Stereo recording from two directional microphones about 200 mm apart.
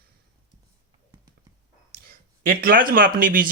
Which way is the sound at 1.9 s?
50° right (ahead or behind).